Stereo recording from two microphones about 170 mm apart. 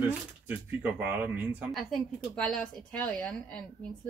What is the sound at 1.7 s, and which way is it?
Speech, 5° left (ahead or behind).